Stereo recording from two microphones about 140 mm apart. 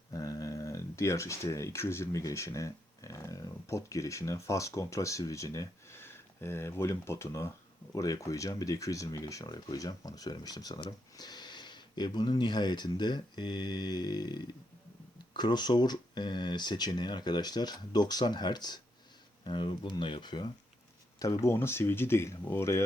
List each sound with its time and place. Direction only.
0.1 s speech: 25° left (ahead or behind)
21.2 s speech: 20° left (ahead or behind)